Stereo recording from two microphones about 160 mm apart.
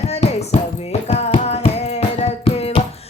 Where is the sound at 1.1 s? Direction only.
40° left (ahead or behind).